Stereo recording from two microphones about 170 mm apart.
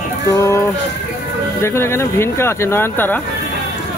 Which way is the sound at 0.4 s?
15° left (ahead or behind).